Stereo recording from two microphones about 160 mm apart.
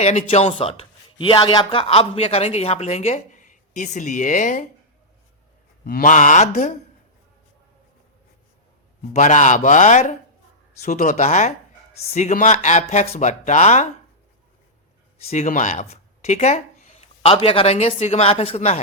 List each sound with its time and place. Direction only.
0.0 s speech: 45° left (ahead or behind)
5.8 s speech: 60° left (ahead or behind)
9.1 s speech: 50° left (ahead or behind)
15.2 s speech: 40° left (ahead or behind)
15.4 s speech: 50° left (ahead or behind)